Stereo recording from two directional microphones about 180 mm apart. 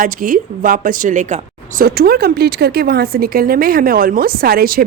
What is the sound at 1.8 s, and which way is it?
A woman's voice, 60° right (ahead or behind).